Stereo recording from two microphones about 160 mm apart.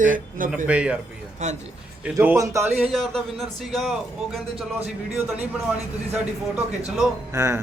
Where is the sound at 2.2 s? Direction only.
15° right (ahead or behind).